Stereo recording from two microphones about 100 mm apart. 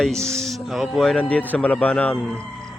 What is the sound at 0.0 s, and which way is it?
Speech, 5° left (ahead or behind).